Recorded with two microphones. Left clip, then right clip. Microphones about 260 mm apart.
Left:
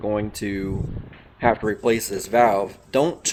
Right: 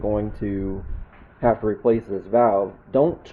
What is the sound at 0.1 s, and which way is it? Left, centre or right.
Speech, left.